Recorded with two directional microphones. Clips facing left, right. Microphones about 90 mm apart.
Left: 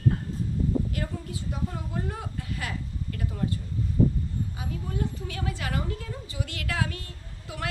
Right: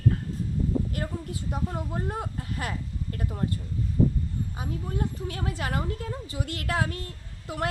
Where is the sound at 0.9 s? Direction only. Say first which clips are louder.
Right 1 dB; 45° right (ahead or behind).